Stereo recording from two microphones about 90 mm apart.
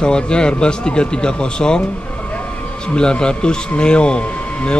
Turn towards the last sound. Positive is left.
turn(degrees=10)  # may be behind; listen again after turning